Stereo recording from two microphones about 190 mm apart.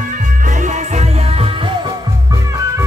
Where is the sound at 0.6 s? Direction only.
35° right (ahead or behind).